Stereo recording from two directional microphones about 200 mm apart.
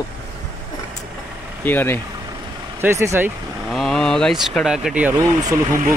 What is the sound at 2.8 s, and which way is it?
Speech, 15° right (ahead or behind).